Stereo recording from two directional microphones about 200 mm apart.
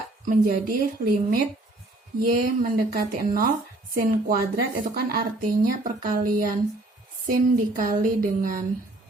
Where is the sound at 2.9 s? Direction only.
45° right (ahead or behind).